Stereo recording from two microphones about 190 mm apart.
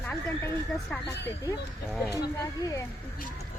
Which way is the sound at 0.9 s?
10° left (ahead or behind).